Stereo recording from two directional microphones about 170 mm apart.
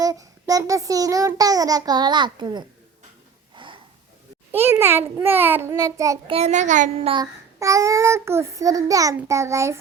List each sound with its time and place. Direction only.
0.0 s child singing: 20° right (ahead or behind)
3.5 s snort: 30° right (ahead or behind)
4.5 s child singing: 15° right (ahead or behind)
6.3 s a woman's voice: 40° right (ahead or behind)
7.1 s child singing: 20° right (ahead or behind)